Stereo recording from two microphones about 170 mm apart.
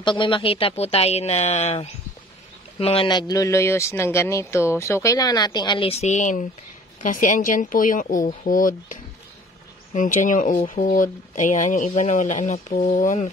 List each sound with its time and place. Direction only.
0.0 s a woman's voice: 30° left (ahead or behind); by 13.3 s 50° left (ahead or behind)